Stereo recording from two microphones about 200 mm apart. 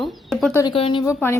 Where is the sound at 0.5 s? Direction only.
20° left (ahead or behind).